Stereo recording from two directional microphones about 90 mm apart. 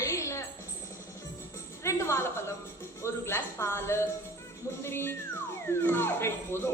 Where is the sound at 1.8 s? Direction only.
30° left (ahead or behind).